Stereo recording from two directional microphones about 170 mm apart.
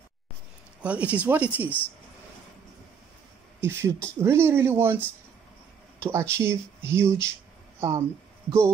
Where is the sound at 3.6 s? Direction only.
15° right (ahead or behind).